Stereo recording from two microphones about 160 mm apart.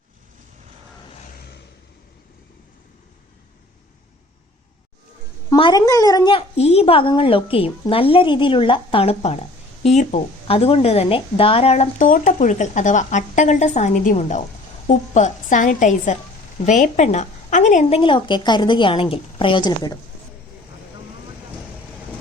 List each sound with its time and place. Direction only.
1.4 s vehicle: 90° left
5.5 s speech: 30° left (ahead or behind)
6.6 s a woman's voice: 40° left (ahead or behind)
12.0 s a woman's voice: 55° left (ahead or behind); by 20.0 s 25° left (ahead or behind)